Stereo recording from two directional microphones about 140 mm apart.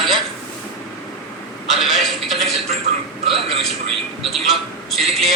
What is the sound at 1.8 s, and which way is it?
Speech, centre (ahead or behind).